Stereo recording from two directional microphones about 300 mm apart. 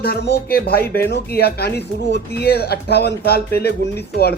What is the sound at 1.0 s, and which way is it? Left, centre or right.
Speech, left.